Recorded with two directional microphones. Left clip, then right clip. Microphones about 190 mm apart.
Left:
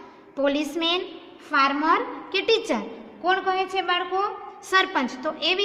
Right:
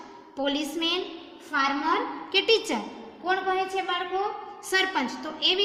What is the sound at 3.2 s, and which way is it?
Speech, 40° left (ahead or behind).